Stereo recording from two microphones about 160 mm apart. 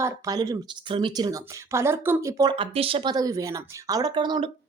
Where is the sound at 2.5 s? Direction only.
35° right (ahead or behind).